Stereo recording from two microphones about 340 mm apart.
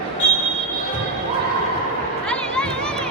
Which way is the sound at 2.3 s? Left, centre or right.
Centre.